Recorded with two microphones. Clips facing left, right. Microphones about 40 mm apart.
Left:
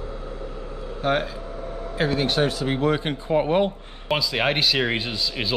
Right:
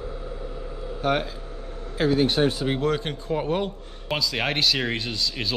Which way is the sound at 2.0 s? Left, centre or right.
Left.